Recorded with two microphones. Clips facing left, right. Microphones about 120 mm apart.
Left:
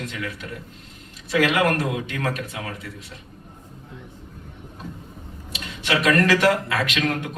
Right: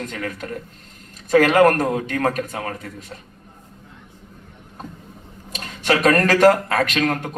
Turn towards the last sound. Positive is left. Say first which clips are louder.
# right 4 dB
turn(degrees=-45)  # may be behind; listen again after turning